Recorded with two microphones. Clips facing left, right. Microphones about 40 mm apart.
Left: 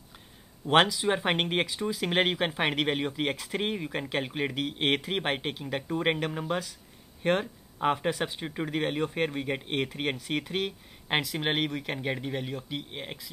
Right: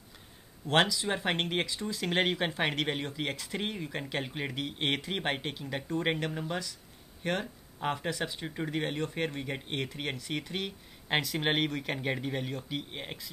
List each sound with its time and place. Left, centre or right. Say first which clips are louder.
0.7 s speech: left 4 dB; centre
11.1 s speech: left 1 dB; centre